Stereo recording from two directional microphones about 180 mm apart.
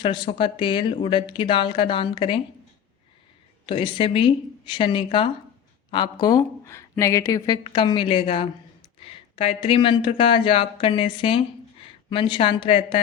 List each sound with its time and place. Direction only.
0.0 s speech: 25° left (ahead or behind)
3.7 s speech: 30° left (ahead or behind)